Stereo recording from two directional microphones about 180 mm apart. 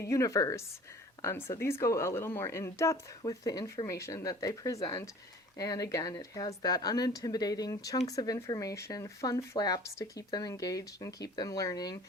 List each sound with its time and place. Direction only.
0.0 s speech: 15° left (ahead or behind)